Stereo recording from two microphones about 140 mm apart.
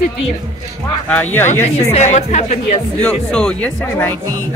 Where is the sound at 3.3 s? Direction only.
5° left (ahead or behind).